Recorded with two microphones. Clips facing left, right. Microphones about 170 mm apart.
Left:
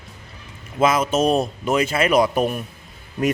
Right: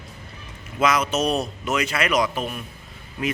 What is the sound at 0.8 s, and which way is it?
Speech, 25° left (ahead or behind).